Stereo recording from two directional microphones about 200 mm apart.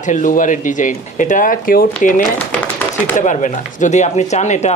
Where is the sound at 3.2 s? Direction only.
40° left (ahead or behind).